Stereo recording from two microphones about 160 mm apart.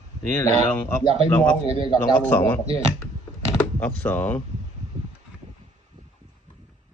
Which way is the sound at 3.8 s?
10° left (ahead or behind).